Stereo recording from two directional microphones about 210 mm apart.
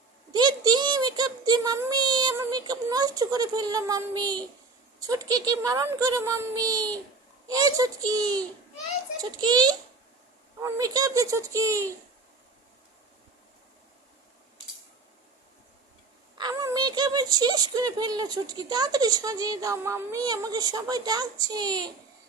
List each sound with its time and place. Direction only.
0.3 s a child's voice: 20° right (ahead or behind)
16.4 s speech: 15° right (ahead or behind)